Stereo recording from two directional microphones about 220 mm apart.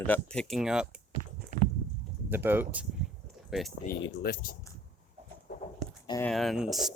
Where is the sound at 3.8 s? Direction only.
45° left (ahead or behind).